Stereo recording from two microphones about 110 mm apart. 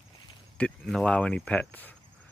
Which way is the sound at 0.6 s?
5° left (ahead or behind).